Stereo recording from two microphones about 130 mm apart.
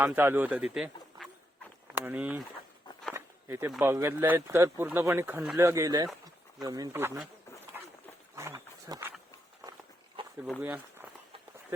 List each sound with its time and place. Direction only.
0.0 s speech: 15° right (ahead or behind)
3.2 s a sound: 20° right (ahead or behind)
3.8 s speech: 20° right (ahead or behind)
6.9 s speech: 15° right (ahead or behind)
8.4 s wild animals: 20° right (ahead or behind)
10.6 s speech: 10° right (ahead or behind)